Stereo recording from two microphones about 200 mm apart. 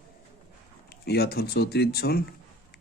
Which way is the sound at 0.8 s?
50° left (ahead or behind).